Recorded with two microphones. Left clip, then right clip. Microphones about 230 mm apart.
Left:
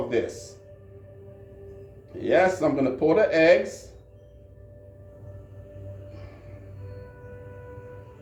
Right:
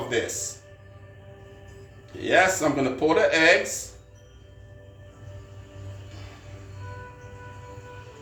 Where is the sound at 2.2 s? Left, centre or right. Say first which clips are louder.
Right 1 dB; centre.